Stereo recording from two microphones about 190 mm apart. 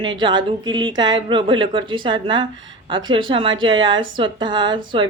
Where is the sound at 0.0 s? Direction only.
25° right (ahead or behind).